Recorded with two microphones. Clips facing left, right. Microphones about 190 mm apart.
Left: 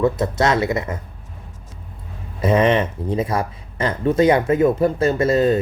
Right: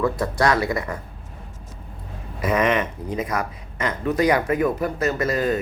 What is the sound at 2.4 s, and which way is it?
Speech, 30° left (ahead or behind).